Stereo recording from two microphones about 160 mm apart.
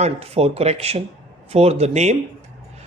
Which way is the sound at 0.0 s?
40° right (ahead or behind).